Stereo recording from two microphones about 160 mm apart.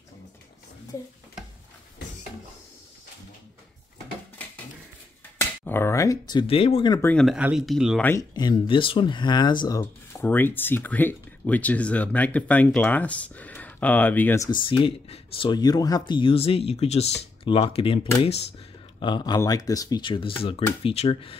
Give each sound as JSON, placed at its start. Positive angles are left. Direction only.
{"t": 5.7, "sound": "speech", "side_deg": 15}
{"t": 7.0, "sound": "speech", "side_deg": 10}
{"t": 7.2, "sound": "speech", "side_deg": -5}
{"t": 8.0, "sound": "speech", "side_deg": 15}
{"t": 8.4, "sound": "speech", "side_deg": 30}
{"t": 14.5, "sound": "speech", "side_deg": 30}